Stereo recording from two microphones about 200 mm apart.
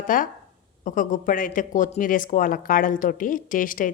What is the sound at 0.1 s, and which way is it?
A woman's voice, 40° left (ahead or behind).